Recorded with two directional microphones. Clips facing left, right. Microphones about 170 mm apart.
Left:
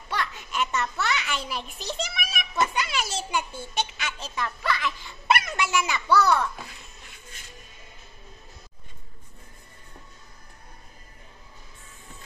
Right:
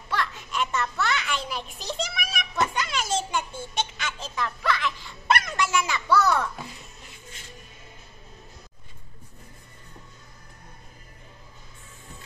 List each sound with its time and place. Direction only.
0.1 s baby laughter: centre (ahead or behind)